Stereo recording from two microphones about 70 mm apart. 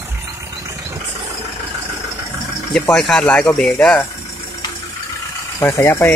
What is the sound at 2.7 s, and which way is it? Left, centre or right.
Speech, centre.